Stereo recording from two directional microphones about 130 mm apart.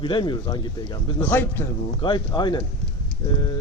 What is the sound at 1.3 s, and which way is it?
Speech, 15° left (ahead or behind).